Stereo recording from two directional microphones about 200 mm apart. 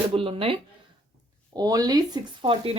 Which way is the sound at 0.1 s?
25° right (ahead or behind).